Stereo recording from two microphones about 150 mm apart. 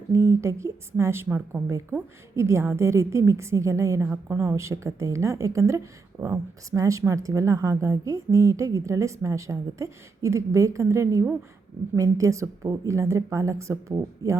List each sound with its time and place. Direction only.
0.1 s a woman's voice: 20° right (ahead or behind)